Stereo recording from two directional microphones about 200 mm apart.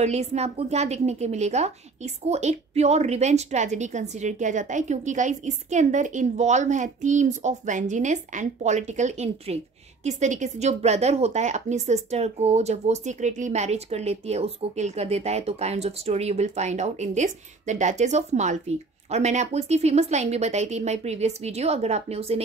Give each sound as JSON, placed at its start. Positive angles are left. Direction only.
{"t": 0.0, "sound": "a woman's voice", "side_deg": -35}